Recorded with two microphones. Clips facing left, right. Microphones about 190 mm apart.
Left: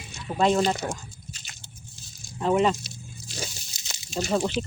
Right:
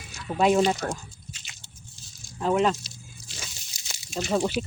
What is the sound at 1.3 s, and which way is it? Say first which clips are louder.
Biting: left 2 dB; 40° left (ahead or behind).